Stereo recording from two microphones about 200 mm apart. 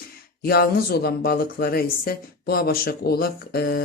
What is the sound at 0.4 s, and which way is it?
Speech, 50° left (ahead or behind).